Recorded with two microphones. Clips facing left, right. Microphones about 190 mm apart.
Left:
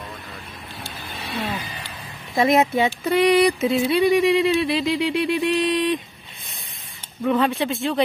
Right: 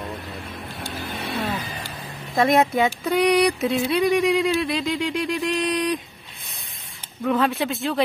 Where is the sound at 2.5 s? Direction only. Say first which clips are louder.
Left 1 dB; centre (ahead or behind).